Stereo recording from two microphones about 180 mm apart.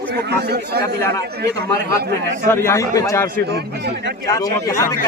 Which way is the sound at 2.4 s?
15° left (ahead or behind).